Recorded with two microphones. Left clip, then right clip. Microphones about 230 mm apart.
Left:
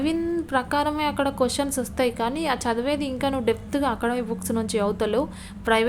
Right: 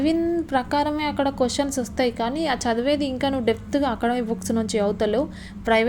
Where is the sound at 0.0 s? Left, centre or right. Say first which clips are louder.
Right 3 dB; centre.